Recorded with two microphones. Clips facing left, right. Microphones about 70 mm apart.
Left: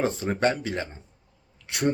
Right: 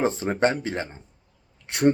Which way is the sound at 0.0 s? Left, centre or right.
Right.